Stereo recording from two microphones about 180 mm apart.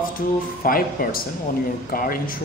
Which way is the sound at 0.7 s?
55° left (ahead or behind).